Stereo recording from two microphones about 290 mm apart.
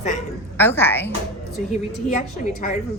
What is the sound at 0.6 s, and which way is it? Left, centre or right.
Speech, centre.